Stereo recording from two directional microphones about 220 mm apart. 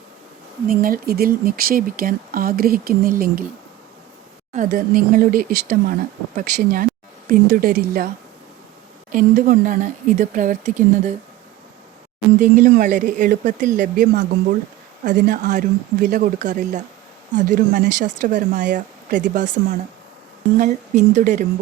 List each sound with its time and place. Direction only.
0.7 s speech: 40° right (ahead or behind)
4.5 s speech: 40° right (ahead or behind)
9.1 s speech: 35° right (ahead or behind)
12.4 s speech: 35° right (ahead or behind)
20.6 s speech: 30° right (ahead or behind)